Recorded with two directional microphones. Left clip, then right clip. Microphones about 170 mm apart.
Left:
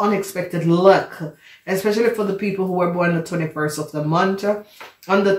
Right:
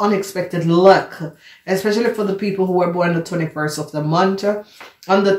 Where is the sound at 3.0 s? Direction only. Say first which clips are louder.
Right 2 dB; 25° right (ahead or behind).